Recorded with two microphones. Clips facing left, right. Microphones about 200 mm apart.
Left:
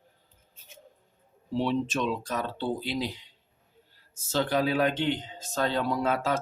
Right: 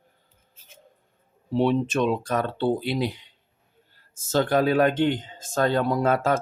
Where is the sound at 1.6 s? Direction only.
55° right (ahead or behind).